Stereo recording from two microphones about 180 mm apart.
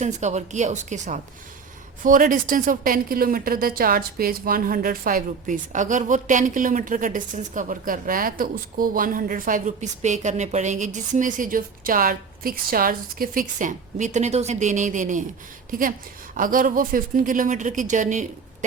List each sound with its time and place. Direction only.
0.0 s a woman's voice: 40° right (ahead or behind)